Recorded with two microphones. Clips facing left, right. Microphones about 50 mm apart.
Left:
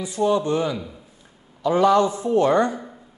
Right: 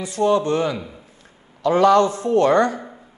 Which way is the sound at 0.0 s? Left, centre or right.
Right.